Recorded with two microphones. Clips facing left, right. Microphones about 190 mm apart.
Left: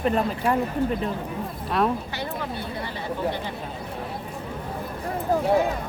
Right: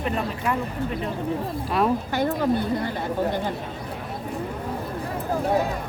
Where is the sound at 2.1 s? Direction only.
50° right (ahead or behind).